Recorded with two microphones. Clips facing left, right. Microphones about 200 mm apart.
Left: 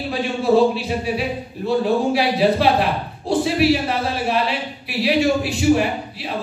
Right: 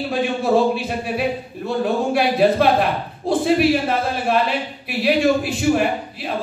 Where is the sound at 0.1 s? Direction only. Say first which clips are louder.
Left 1 dB; 50° right (ahead or behind).